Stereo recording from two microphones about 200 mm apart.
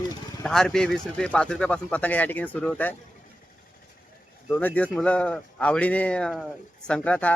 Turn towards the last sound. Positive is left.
turn(degrees=5)  # may be behind; listen again after turning